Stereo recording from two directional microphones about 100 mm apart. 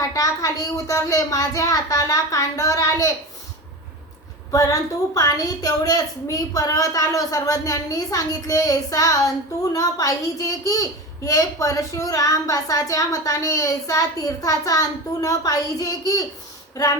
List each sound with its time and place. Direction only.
0.1 s a child's voice: 35° left (ahead or behind)
4.5 s a child's voice: 35° left (ahead or behind)